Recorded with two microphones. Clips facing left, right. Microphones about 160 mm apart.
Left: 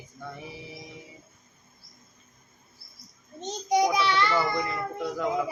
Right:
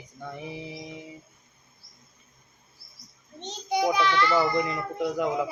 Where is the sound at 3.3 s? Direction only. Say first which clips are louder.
Left 4 dB; 40° left (ahead or behind).